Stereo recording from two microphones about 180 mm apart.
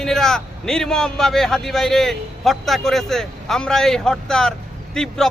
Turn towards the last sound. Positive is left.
turn(degrees=0)  # may be behind; listen again after turning